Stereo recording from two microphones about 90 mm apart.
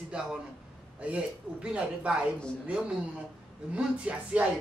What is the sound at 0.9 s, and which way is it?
Speech, 15° right (ahead or behind).